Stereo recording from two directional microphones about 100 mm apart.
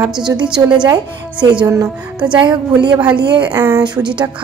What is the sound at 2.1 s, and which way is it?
Speech, 10° right (ahead or behind).